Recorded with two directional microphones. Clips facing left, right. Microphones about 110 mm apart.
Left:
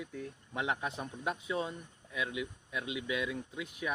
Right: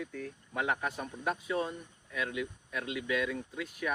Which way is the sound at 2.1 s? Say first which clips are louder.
Right 2 dB; 20° left (ahead or behind).